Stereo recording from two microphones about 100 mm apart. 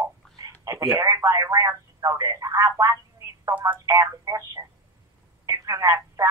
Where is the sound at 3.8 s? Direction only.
30° right (ahead or behind).